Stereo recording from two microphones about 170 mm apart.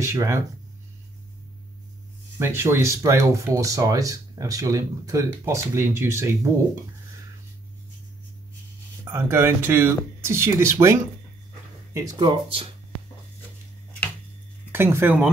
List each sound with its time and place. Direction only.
0.0 s speech: 15° right (ahead or behind)
2.3 s speech: 15° right (ahead or behind)
9.0 s speech: 15° right (ahead or behind)
14.7 s speech: 15° right (ahead or behind)